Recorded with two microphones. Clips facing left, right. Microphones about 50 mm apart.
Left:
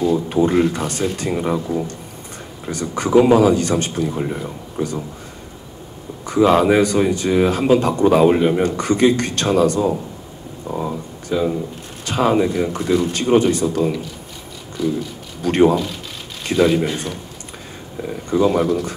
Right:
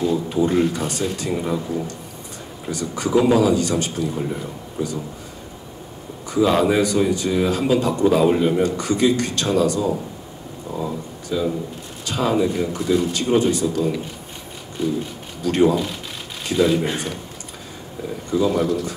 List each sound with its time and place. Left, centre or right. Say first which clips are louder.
0.3 s a man's voice: left 2 dB; left
2.7 s a man's voice: left 4 dB; left
6.2 s a man's voice: left 4 dB; left
10.7 s a sound: left 3 dB; left
12.0 s a man's voice: left 3 dB; left
15.4 s a man's voice: left 3 dB; left
16.8 s a man's voice: left 2 dB; right
18.3 s a man's voice: left 3 dB; left